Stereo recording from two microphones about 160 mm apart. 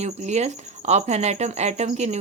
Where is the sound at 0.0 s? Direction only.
45° right (ahead or behind).